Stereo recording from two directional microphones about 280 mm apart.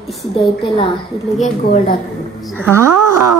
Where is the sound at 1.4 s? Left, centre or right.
Left.